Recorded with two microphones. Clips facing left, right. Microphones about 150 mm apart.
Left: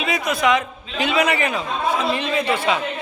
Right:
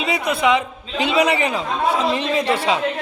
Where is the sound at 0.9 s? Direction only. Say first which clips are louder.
Right 2 dB; 30° right (ahead or behind).